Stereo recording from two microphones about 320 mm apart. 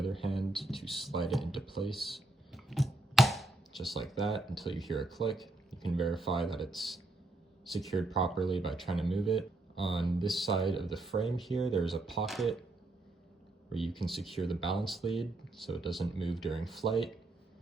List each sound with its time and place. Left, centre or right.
0.0 s speech: centre
13.7 s speech: centre